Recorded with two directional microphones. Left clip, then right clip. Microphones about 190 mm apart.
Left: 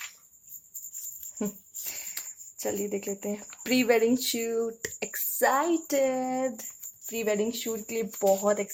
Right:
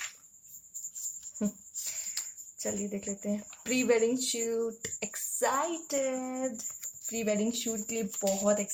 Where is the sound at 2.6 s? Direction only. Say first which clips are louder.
Left 5 dB; 50° left (ahead or behind).